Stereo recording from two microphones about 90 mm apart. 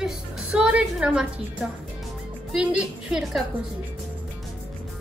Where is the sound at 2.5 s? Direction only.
5° right (ahead or behind).